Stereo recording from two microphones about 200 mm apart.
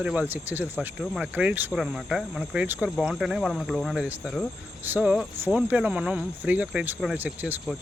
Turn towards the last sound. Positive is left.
turn(degrees=-10)  # may be behind; listen again after turning